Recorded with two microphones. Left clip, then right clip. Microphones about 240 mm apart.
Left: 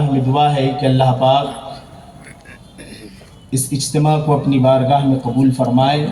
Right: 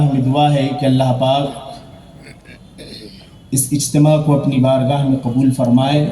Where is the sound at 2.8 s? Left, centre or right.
Centre.